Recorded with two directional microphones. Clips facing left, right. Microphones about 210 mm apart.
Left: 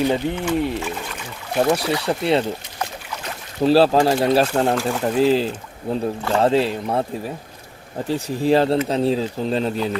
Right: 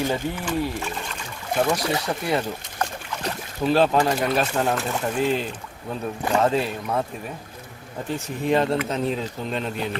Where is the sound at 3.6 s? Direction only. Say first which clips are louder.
Left 5 dB; 35° left (ahead or behind).